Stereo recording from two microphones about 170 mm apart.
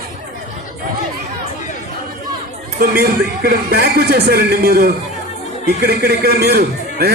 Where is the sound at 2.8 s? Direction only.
60° right (ahead or behind).